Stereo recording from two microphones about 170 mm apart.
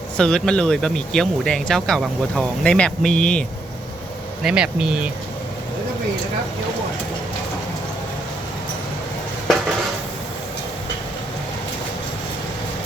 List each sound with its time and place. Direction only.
0.2 s speech: 5° left (ahead or behind)
4.4 s speech: 5° right (ahead or behind)